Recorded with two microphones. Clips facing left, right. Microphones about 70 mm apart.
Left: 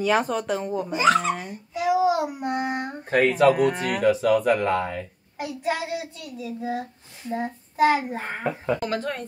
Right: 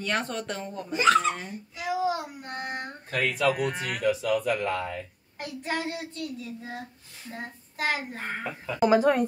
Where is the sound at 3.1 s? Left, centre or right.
Left.